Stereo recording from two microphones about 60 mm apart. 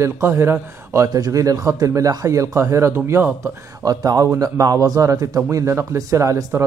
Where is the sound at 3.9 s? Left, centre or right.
Right.